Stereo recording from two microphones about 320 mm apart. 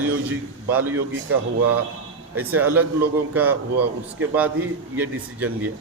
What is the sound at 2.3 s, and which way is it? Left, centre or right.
A man's voice, centre.